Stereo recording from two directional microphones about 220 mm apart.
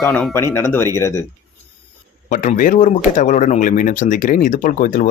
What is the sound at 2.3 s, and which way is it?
Speech, 35° left (ahead or behind).